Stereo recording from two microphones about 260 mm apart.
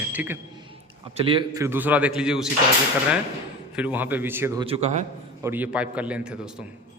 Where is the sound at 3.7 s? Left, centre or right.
Centre.